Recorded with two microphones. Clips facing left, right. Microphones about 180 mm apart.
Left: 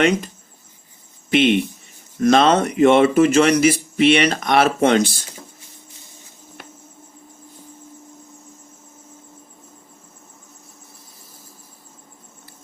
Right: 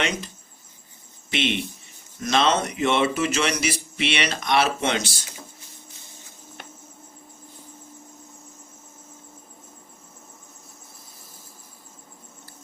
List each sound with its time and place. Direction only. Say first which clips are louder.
1.3 s speech: left 10 dB; 50° left (ahead or behind)